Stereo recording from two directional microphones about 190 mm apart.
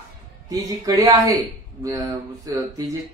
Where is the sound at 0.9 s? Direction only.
20° right (ahead or behind).